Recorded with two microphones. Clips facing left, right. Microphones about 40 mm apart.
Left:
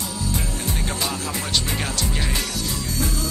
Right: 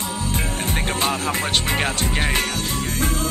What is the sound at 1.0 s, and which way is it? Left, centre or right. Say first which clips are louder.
Music: right 5 dB; right.